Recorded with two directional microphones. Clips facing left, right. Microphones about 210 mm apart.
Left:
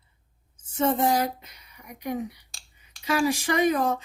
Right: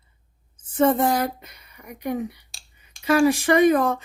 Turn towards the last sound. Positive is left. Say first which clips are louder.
# right 6 dB
turn(degrees=-55)  # may be behind; listen again after turning